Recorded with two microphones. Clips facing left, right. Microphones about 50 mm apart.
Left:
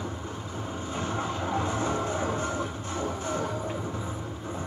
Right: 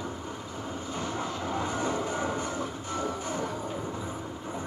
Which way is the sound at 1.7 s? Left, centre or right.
Left.